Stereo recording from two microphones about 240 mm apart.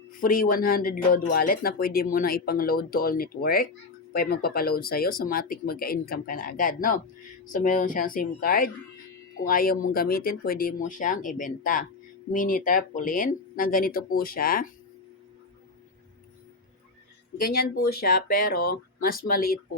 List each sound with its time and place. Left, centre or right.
0.2 s speech: left
17.4 s speech: left